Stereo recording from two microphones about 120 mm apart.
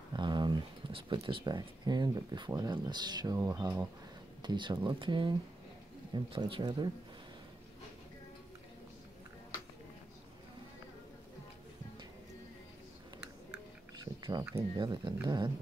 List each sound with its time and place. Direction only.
0.1 s speech: 40° right (ahead or behind)
13.9 s a sound: 35° right (ahead or behind)
14.8 s speech: 40° right (ahead or behind)